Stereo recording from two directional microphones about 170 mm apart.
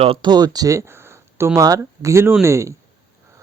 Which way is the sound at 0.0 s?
30° right (ahead or behind).